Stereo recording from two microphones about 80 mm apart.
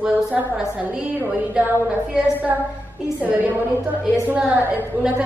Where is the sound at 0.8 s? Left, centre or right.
Right.